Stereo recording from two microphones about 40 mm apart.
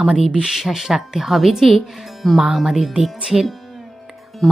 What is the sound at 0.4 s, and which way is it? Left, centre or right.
Speech, centre.